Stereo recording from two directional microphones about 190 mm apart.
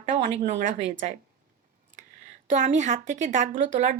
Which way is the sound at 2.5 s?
40° right (ahead or behind).